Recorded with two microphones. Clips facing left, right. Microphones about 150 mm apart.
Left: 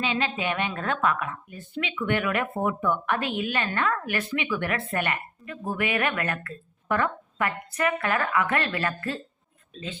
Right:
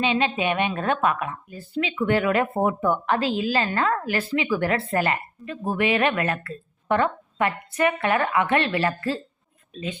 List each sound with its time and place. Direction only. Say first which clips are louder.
0.0 s a woman's voice: right 5 dB; 20° right (ahead or behind)